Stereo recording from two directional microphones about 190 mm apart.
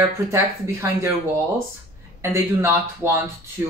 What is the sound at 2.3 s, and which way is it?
Speech, 15° right (ahead or behind).